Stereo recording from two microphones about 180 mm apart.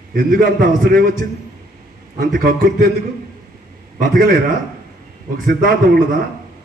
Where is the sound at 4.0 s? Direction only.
55° right (ahead or behind).